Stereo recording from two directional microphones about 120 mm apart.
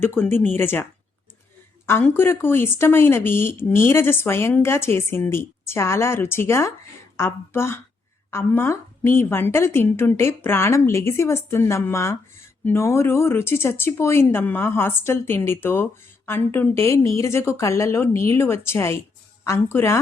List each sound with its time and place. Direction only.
0.0 s speech: 20° left (ahead or behind)
1.9 s speech: 20° left (ahead or behind)